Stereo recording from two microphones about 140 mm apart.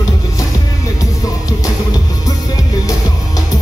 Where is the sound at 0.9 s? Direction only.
25° left (ahead or behind).